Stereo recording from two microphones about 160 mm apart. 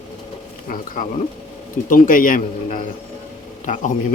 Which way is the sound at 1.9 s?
60° left (ahead or behind).